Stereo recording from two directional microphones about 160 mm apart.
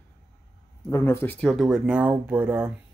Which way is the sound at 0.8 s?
15° left (ahead or behind).